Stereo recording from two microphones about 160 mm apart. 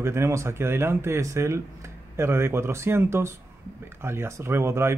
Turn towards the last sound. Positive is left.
turn(degrees=-15)  # may be behind; listen again after turning